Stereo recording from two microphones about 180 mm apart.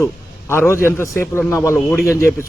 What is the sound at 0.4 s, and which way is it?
A man's voice, 15° left (ahead or behind).